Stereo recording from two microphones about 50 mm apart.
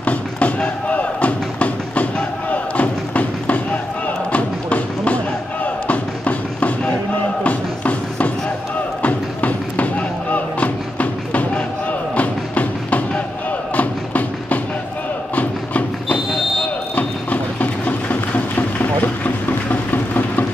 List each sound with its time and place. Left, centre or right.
0.0 s music: left
4.3 s thump: left
7.4 s music: left
16.9 s a sound: left